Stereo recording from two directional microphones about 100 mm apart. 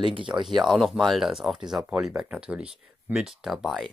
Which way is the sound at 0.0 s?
55° right (ahead or behind).